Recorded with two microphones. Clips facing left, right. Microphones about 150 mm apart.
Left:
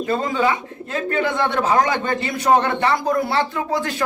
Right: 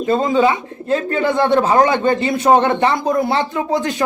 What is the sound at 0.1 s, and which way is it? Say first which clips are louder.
A man's voice: right 6 dB; 25° right (ahead or behind).